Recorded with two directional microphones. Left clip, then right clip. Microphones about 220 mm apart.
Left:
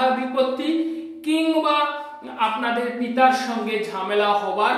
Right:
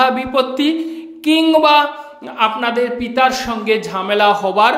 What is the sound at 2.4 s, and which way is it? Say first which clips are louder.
A man's voice: right 6 dB; 45° right (ahead or behind).